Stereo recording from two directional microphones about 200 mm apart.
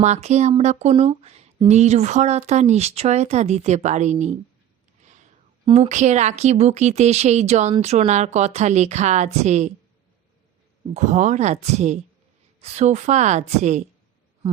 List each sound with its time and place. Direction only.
0.0 s speech: 35° right (ahead or behind)
5.6 s speech: 30° right (ahead or behind)
10.9 s speech: 35° right (ahead or behind)